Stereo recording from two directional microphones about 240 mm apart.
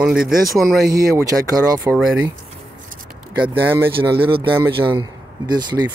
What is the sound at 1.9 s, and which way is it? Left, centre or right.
Speech, centre.